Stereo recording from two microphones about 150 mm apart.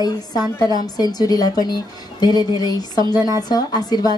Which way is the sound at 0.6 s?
25° left (ahead or behind).